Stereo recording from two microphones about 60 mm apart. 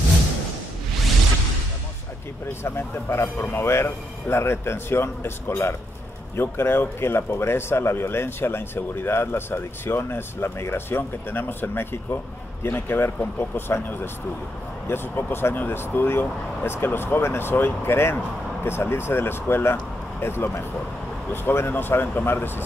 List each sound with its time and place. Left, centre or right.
2.6 s speech: left